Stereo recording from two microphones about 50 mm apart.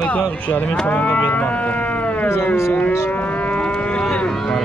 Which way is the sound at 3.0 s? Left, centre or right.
Left.